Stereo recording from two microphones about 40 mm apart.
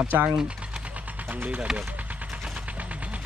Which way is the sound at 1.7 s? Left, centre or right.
Centre.